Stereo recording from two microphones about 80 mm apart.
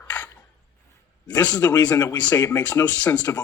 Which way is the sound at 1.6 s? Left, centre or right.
Left.